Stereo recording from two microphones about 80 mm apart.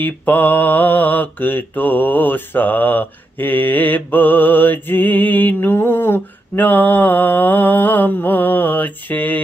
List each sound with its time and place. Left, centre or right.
0.0 s mantra: left